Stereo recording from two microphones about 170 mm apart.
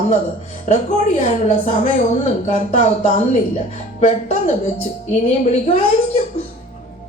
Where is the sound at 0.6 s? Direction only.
45° left (ahead or behind).